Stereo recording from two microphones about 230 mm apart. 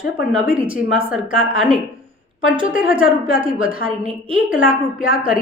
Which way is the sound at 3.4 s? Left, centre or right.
Right.